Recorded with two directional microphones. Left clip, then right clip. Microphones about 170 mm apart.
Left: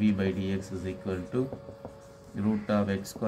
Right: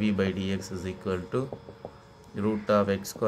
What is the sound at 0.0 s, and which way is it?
Speech, 40° right (ahead or behind).